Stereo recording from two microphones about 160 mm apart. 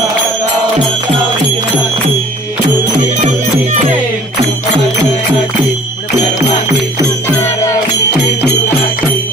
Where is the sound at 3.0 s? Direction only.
45° right (ahead or behind).